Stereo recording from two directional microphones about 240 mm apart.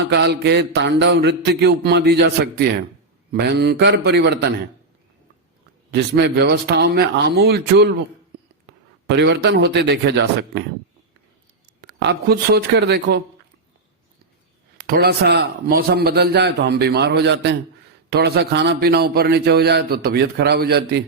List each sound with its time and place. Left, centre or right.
0.1 s a man's voice: right
5.9 s a man's voice: right
9.0 s a man's voice: right
11.8 s a man's voice: right
14.8 s a man's voice: right